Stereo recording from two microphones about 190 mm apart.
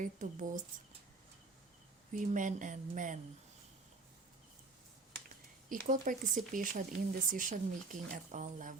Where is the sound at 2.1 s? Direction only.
40° right (ahead or behind).